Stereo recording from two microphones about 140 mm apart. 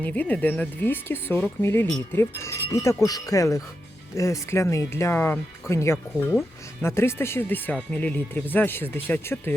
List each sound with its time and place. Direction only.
0.0 s speech: 10° left (ahead or behind)